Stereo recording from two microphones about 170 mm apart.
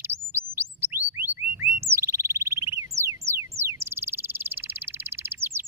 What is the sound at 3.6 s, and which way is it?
Bird, 15° right (ahead or behind).